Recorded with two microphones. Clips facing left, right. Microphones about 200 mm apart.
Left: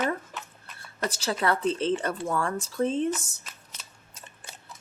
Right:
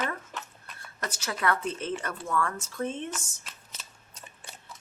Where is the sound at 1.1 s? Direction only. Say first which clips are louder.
Left 2 dB; 30° left (ahead or behind).